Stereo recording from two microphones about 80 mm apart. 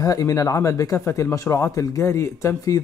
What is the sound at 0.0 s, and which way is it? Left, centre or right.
Speech, left.